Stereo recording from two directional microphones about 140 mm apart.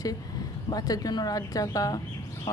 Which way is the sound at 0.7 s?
25° left (ahead or behind).